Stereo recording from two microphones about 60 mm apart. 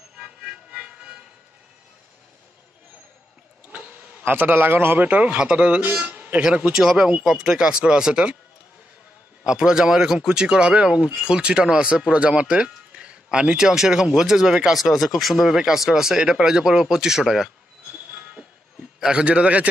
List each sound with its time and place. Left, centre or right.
0.2 s a sound: centre
4.2 s a man's voice: right; by 8.4 s centre
9.4 s speech: centre
18.1 s music: centre